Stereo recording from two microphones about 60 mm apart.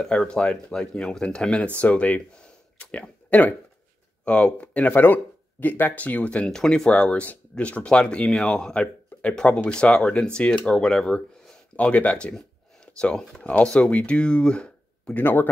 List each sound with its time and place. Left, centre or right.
0.0 s speech: centre
15.1 s speech: left